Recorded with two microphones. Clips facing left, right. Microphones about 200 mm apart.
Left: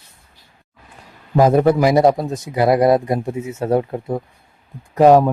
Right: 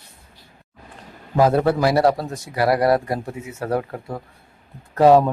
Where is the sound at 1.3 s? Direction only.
15° left (ahead or behind).